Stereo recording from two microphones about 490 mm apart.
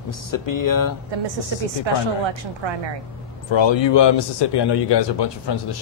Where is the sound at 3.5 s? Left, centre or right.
Left.